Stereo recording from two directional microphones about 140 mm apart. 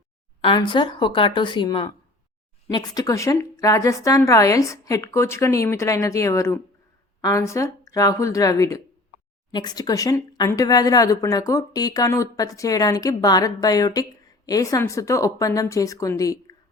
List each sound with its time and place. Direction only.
0.4 s speech: 35° left (ahead or behind)